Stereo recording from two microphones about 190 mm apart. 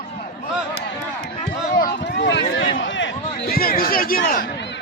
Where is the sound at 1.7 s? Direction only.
60° left (ahead or behind); by 3.5 s 75° left (ahead or behind).